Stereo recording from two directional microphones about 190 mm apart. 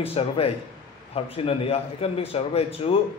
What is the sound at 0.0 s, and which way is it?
A man's voice, 30° left (ahead or behind).